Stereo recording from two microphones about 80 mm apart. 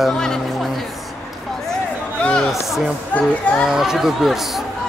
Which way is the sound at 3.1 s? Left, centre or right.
Centre.